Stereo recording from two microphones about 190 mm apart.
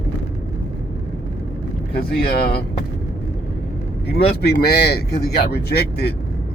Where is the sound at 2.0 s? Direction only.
55° left (ahead or behind).